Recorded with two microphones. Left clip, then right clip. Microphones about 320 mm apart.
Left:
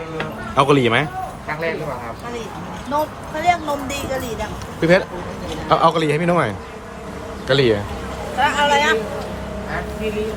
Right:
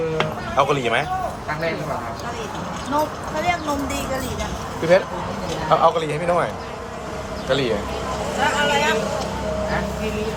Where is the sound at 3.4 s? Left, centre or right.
Left.